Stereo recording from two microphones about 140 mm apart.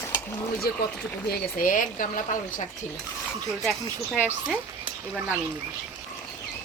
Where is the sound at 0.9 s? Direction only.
10° left (ahead or behind).